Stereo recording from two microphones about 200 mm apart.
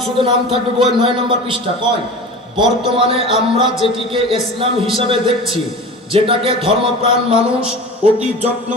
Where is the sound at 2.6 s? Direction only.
25° right (ahead or behind).